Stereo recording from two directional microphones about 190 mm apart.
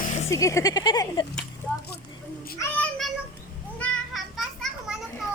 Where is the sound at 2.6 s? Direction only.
5° left (ahead or behind).